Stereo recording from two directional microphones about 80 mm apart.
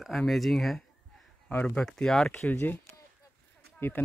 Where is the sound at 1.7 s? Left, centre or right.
Centre.